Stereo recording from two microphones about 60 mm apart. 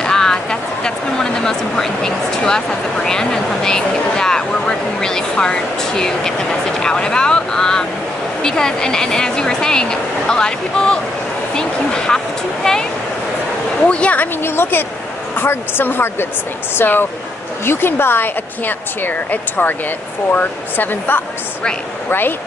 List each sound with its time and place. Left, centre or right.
0.0 s speech: centre
13.8 s speech: centre
14.2 s speech: left